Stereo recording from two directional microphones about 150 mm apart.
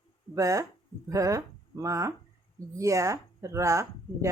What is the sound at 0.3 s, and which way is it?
A woman's voice, 20° right (ahead or behind).